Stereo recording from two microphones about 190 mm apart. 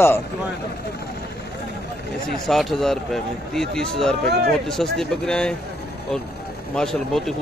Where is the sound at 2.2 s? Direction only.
Centre (ahead or behind).